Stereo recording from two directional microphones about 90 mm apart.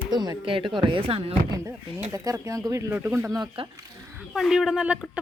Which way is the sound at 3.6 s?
90° right.